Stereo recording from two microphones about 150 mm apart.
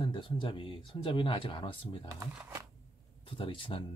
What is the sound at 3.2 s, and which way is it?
Speech, 35° left (ahead or behind).